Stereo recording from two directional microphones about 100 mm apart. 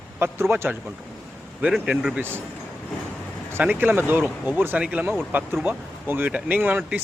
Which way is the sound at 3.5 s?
15° right (ahead or behind).